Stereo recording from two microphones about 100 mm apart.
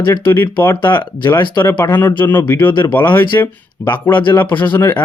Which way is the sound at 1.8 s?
20° left (ahead or behind).